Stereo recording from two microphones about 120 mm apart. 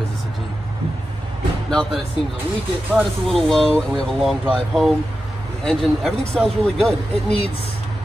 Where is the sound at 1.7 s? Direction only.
5° left (ahead or behind).